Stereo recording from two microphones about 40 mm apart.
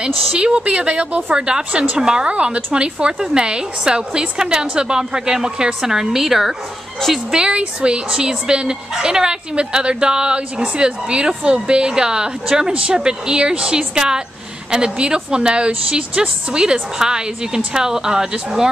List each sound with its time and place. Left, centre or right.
0.0 s speech: right; by 6.5 s centre
7.2 s speech: right